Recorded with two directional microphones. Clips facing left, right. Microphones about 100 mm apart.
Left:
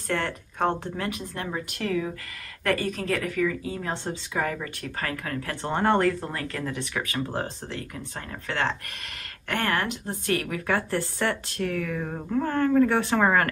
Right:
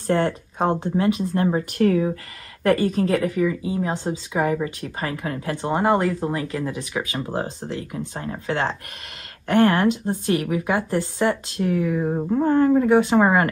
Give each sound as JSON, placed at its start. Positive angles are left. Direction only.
{"t": 0.0, "sound": "a woman's voice", "side_deg": -30}
{"t": 3.4, "sound": "speech", "side_deg": -20}
{"t": 8.1, "sound": "a woman's voice", "side_deg": -25}